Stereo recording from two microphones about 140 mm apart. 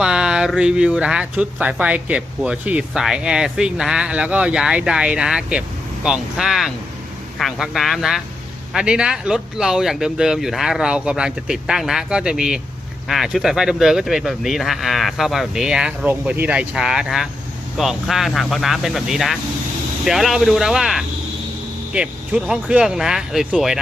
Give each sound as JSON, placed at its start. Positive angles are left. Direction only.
{"t": 0.0, "sound": "speech", "side_deg": -5}